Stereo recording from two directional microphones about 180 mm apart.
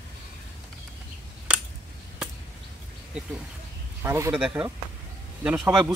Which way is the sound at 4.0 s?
15° right (ahead or behind).